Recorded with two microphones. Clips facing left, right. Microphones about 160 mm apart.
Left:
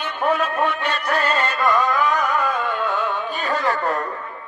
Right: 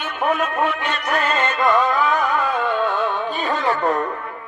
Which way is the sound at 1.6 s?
20° right (ahead or behind).